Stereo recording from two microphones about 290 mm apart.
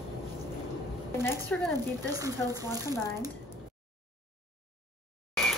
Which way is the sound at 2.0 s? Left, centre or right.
Centre.